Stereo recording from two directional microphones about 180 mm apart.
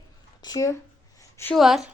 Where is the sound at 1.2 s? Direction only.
15° left (ahead or behind).